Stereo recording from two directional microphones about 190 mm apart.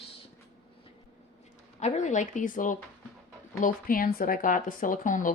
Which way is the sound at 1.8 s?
40° left (ahead or behind).